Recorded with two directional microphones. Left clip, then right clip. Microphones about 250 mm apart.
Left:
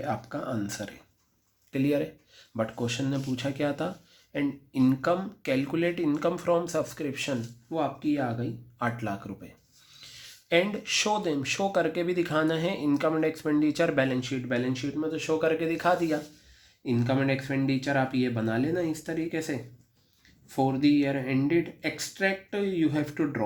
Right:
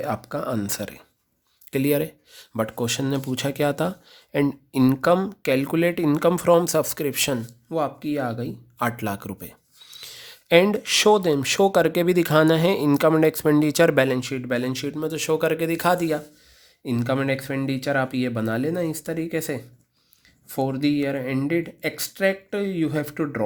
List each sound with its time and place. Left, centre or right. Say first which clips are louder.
0.0 s speech: right 5 dB; right